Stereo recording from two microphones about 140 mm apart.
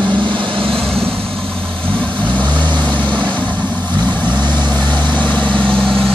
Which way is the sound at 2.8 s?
10° left (ahead or behind).